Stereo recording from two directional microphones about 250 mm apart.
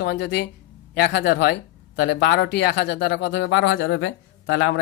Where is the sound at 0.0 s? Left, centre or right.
Left.